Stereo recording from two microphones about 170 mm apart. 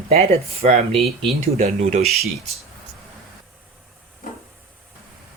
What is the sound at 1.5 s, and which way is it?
Speech, 40° right (ahead or behind).